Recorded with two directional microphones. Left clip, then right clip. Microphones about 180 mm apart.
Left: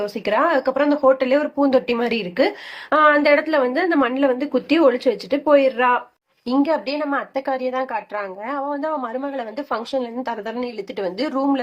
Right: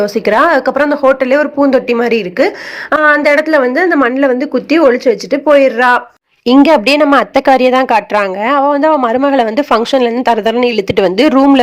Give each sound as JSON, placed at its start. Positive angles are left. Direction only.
{"t": 0.0, "sound": "a woman's voice", "side_deg": -40}
{"t": 6.4, "sound": "a woman's voice", "side_deg": -50}